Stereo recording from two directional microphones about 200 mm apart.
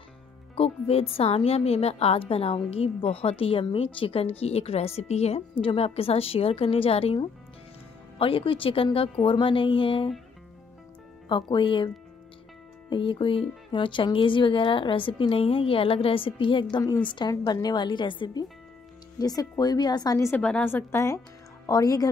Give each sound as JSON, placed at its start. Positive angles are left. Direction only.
{"t": 0.6, "sound": "a woman's voice", "side_deg": 30}
{"t": 11.2, "sound": "a woman's voice", "side_deg": 25}
{"t": 12.9, "sound": "a woman's voice", "side_deg": 25}